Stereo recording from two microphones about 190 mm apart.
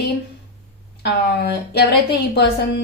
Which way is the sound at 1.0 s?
55° left (ahead or behind).